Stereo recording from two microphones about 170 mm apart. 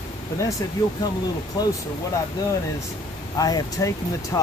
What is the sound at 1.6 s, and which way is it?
Speech, 25° left (ahead or behind).